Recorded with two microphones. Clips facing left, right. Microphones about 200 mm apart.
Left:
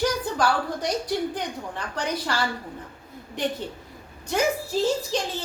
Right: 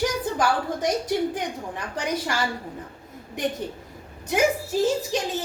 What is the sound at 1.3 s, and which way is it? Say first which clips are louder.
A woman's voice: right 1 dB; 15° right (ahead or behind).